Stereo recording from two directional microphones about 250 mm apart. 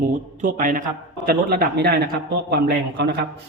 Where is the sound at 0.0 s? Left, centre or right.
Right.